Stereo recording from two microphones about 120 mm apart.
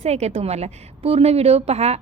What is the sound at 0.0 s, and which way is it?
A woman's voice, 65° right (ahead or behind).